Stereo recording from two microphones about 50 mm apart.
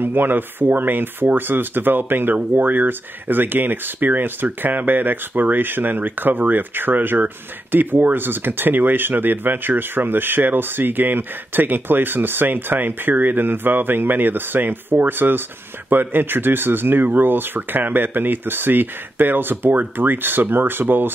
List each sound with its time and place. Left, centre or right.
0.0 s speech: right